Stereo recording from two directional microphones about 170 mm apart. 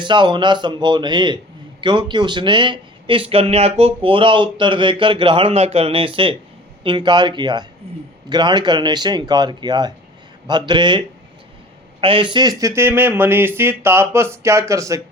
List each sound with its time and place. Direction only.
0.0 s a man's voice: 25° right (ahead or behind)